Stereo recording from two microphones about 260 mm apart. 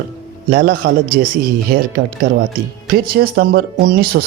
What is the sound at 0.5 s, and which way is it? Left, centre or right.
Speech, right.